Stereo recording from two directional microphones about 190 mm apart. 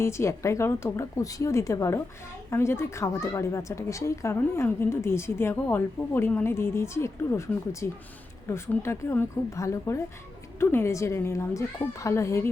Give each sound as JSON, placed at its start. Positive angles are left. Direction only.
{"t": 0.0, "sound": "speech", "side_deg": 15}